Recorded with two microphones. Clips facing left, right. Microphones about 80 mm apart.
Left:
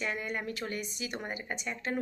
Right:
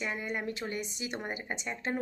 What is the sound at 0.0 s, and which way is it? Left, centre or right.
A woman's voice, centre.